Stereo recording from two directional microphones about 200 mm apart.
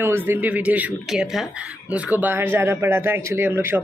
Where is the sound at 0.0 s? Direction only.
10° right (ahead or behind).